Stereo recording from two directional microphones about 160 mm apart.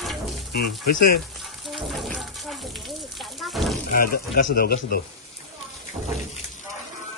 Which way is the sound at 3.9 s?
65° left (ahead or behind).